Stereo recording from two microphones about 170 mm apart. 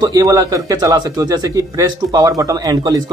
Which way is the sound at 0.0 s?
20° right (ahead or behind).